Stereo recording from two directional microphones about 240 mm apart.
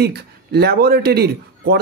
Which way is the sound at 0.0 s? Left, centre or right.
Right.